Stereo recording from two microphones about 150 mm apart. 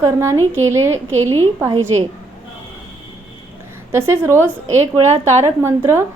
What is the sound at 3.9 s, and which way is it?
Speech, 15° right (ahead or behind).